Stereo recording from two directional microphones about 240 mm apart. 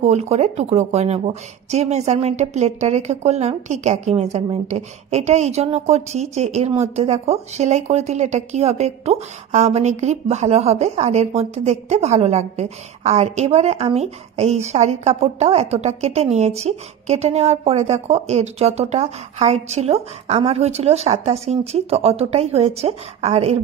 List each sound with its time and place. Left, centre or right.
0.0 s speech: right